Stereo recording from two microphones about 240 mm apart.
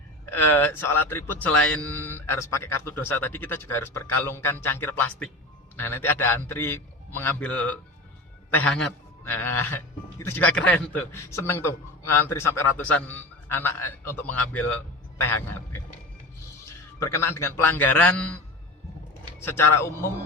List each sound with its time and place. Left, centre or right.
0.3 s a man's voice: centre
17.3 s a man's voice: centre
19.5 s a man's voice: centre